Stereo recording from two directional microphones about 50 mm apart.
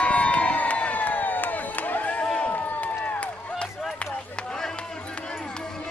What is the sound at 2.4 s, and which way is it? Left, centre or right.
Run, left.